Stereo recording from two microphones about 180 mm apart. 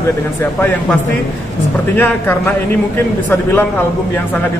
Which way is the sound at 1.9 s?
10° left (ahead or behind).